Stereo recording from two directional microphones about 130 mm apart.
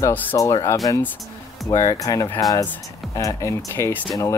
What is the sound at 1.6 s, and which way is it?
Speech, 25° left (ahead or behind).